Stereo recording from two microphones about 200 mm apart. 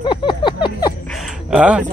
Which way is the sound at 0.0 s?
25° left (ahead or behind).